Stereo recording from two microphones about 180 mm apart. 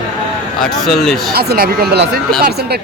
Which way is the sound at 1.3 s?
60° right (ahead or behind).